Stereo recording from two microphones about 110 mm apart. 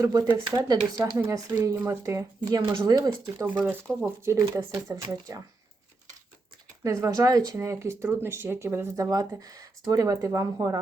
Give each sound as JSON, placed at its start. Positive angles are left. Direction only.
{"t": 0.0, "sound": "speech", "side_deg": -35}
{"t": 3.4, "sound": "speech", "side_deg": -15}
{"t": 4.2, "sound": "speech", "side_deg": -25}
{"t": 6.8, "sound": "speech", "side_deg": -30}